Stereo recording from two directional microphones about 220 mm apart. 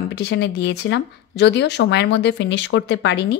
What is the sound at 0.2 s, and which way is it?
Speech, 50° left (ahead or behind).